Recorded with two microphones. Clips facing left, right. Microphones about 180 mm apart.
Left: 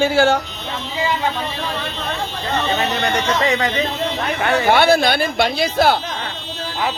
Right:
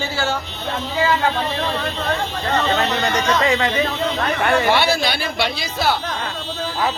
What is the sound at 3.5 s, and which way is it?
Speech, 30° right (ahead or behind).